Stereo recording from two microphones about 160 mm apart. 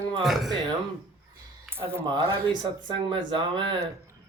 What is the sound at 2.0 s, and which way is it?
Speech, 30° right (ahead or behind).